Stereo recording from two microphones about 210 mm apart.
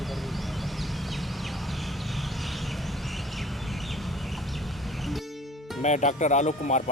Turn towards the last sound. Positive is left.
turn(degrees=35)  # may be behind; listen again after turning